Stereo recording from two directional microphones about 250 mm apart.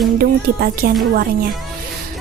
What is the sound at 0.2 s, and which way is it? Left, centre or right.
Speech, right.